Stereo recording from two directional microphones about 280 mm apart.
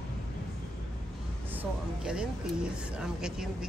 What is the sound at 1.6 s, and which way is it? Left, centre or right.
A woman's voice, centre.